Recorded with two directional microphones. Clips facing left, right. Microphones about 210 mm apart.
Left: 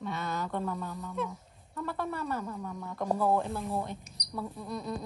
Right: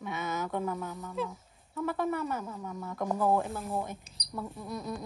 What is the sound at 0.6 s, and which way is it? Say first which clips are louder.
Speech: right 1 dB; centre (ahead or behind).